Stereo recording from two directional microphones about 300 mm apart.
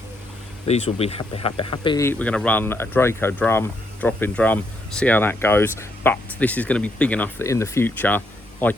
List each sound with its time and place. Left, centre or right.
0.7 s a man's voice: left